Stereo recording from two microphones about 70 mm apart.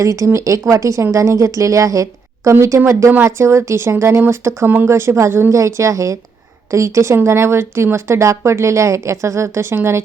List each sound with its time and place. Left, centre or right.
0.0 s a woman's voice: right
4.9 s a woman's voice: right